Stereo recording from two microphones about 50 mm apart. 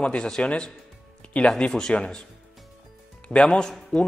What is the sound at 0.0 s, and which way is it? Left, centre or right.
Speech, centre.